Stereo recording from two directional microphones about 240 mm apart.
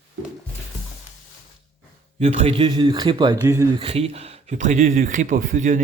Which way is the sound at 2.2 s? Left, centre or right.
Right.